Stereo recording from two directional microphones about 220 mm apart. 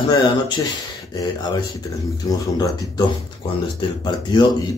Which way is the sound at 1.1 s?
20° left (ahead or behind).